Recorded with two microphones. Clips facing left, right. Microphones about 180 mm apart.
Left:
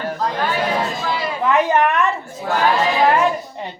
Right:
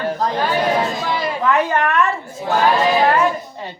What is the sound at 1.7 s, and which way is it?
Speech, 15° left (ahead or behind).